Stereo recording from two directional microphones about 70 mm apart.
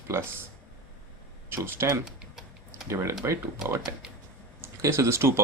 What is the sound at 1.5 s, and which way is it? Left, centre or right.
Speech, right.